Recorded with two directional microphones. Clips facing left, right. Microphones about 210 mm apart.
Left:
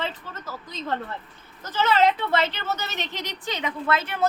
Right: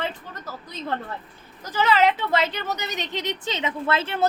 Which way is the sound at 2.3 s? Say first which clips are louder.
Right 1 dB; 15° right (ahead or behind).